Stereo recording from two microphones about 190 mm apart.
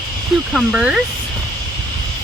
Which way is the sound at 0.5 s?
5° right (ahead or behind).